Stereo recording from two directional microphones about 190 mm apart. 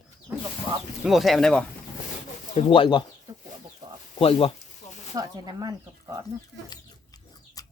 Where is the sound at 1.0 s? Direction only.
Centre (ahead or behind).